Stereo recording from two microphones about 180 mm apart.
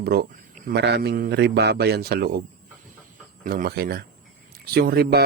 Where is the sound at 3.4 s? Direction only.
50° right (ahead or behind).